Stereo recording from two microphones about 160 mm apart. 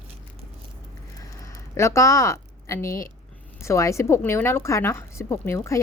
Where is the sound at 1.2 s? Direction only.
20° left (ahead or behind).